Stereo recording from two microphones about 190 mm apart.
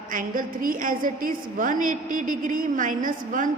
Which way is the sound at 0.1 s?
45° right (ahead or behind).